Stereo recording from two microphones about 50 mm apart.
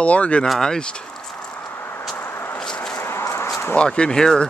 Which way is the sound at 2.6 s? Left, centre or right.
Centre.